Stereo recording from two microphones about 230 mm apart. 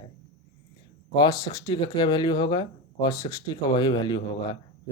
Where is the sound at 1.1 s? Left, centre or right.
Centre.